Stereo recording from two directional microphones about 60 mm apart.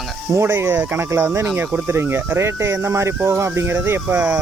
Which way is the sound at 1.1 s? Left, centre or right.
Right.